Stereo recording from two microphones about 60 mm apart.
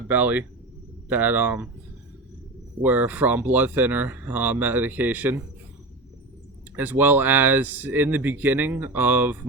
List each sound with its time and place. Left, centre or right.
0.1 s speech: right
2.8 s speech: right
6.7 s speech: right